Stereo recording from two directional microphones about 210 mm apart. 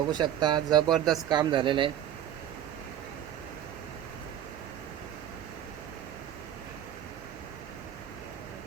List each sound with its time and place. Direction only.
0.1 s speech: 20° right (ahead or behind)
0.9 s speech: centre (ahead or behind)
1.3 s speech: 20° right (ahead or behind)